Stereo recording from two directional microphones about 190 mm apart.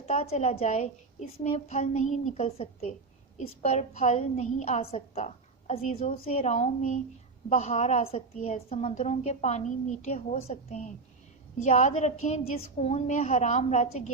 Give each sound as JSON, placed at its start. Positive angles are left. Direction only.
{"t": 0.0, "sound": "a woman's voice", "side_deg": 35}